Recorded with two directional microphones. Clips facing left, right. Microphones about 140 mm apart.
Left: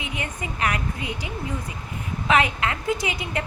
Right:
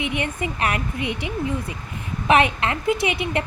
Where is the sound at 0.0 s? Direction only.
25° right (ahead or behind).